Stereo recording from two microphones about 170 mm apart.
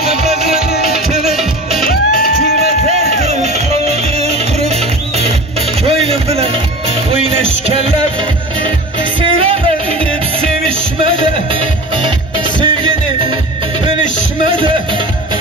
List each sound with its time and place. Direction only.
1.2 s music: centre (ahead or behind)
1.9 s music: 60° left (ahead or behind)
2.9 s music: 40° right (ahead or behind)
9.2 s music: 35° right (ahead or behind)
12.6 s music: 30° right (ahead or behind)